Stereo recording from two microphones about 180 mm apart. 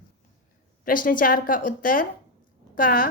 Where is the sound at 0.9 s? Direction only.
50° left (ahead or behind).